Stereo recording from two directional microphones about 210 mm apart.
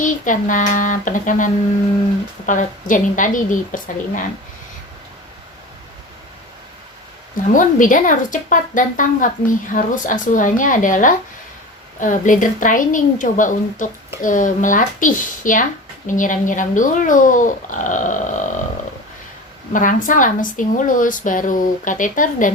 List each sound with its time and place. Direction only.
0.0 s a woman's voice: 40° left (ahead or behind)
2.5 s a woman's voice: 40° left (ahead or behind)
7.5 s a woman's voice: 40° left (ahead or behind)
19.7 s a woman's voice: 40° left (ahead or behind)